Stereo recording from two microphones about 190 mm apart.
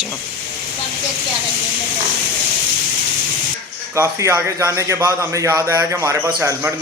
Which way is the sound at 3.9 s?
15° right (ahead or behind).